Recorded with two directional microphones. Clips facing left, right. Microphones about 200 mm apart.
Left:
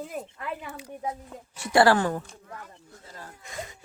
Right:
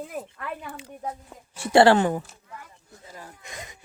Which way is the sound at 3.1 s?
15° right (ahead or behind).